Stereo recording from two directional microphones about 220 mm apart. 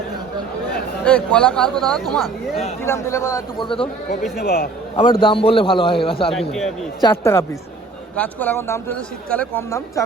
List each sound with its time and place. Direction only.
1.0 s speech: 5° left (ahead or behind)
2.8 s speech: 10° left (ahead or behind)
4.4 s a man's voice: 45° left (ahead or behind)
5.2 s a man's voice: 25° left (ahead or behind)
6.5 s speech: centre (ahead or behind)
7.0 s speech: 10° left (ahead or behind)